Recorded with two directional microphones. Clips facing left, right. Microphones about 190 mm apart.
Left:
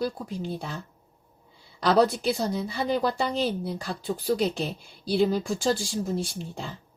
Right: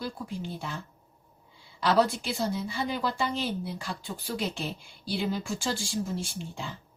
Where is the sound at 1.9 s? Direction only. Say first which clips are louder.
Left 4 dB; 40° left (ahead or behind).